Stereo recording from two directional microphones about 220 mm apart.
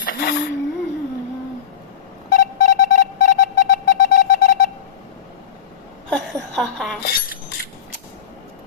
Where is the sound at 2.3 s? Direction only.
40° left (ahead or behind).